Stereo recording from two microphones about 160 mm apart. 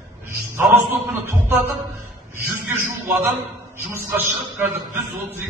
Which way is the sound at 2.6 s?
15° right (ahead or behind).